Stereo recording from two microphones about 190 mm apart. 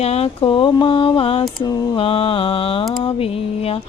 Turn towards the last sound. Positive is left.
turn(degrees=30)  # may be behind; listen again after turning